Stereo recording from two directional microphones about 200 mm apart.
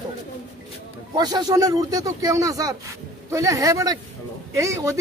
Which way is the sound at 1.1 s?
20° right (ahead or behind).